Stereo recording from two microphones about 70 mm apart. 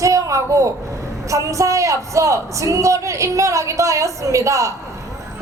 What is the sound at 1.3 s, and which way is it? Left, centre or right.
A woman's voice, right.